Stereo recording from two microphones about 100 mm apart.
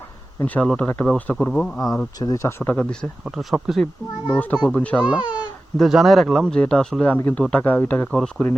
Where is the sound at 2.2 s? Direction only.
40° left (ahead or behind).